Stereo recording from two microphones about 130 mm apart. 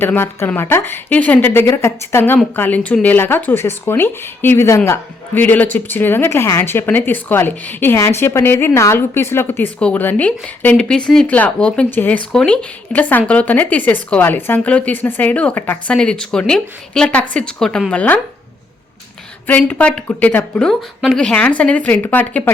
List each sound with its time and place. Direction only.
0.0 s speech: 15° left (ahead or behind)
19.5 s speech: 10° left (ahead or behind)